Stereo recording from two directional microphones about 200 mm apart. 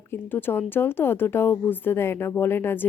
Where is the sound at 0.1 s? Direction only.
10° left (ahead or behind).